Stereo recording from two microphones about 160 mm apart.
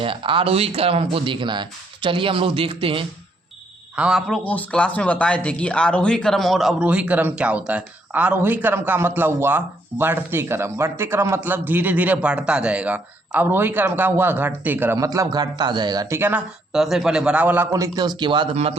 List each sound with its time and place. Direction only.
0.0 s speech: 35° right (ahead or behind)
3.9 s speech: 5° right (ahead or behind)
4.4 s speech: 10° left (ahead or behind); by 18.4 s 30° right (ahead or behind)
18.5 s speech: 40° right (ahead or behind)